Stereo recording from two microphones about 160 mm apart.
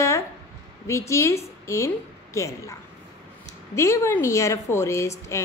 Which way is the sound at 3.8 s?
15° left (ahead or behind).